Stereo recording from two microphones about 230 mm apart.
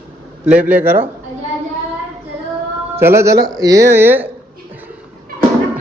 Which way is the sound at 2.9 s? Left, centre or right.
Centre.